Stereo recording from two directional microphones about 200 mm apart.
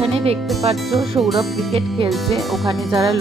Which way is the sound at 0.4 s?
Centre (ahead or behind).